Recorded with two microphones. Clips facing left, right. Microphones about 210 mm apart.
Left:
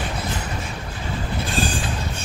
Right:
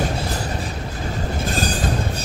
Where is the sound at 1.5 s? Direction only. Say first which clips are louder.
Right 2 dB; 40° right (ahead or behind).